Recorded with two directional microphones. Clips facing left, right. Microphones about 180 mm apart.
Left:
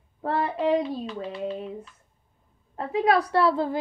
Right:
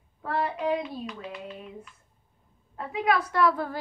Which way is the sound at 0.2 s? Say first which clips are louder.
Left 3 dB; 30° left (ahead or behind).